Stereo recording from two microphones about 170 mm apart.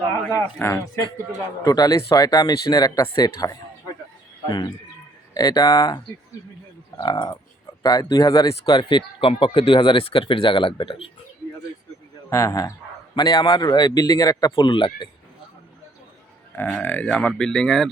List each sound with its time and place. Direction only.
0.3 s speech: 15° left (ahead or behind); by 11.1 s 30° left (ahead or behind)
12.3 s speech: 20° left (ahead or behind)
16.6 s speech: 10° left (ahead or behind)